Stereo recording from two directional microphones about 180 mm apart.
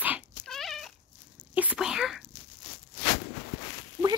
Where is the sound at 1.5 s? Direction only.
10° right (ahead or behind).